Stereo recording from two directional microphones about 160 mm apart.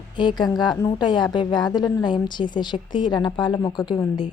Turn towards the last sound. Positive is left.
turn(degrees=30)  # may be behind; listen again after turning